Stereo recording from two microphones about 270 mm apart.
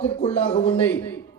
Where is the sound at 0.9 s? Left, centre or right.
Centre.